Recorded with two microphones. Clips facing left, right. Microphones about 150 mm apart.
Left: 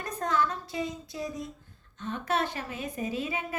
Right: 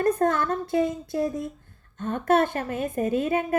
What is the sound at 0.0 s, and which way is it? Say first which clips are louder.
A woman's voice: right 7 dB; 50° right (ahead or behind).